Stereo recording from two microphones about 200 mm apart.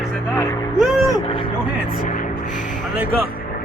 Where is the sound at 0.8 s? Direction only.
Centre (ahead or behind).